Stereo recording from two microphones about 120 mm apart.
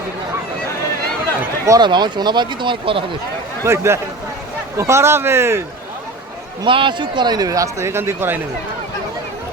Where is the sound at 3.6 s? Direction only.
20° right (ahead or behind).